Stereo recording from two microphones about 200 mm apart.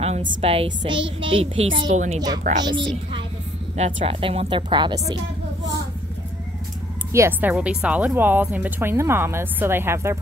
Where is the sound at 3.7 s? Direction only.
35° right (ahead or behind).